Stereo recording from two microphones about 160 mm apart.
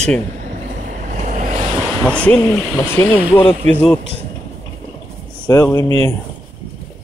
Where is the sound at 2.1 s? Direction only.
10° left (ahead or behind).